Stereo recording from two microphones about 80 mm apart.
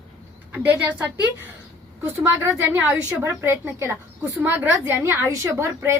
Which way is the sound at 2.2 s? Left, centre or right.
Right.